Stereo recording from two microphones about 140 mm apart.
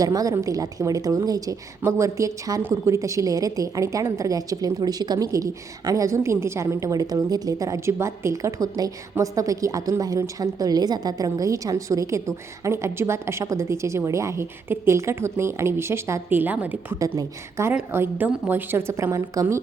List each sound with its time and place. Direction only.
0.0 s a woman's voice: 25° right (ahead or behind)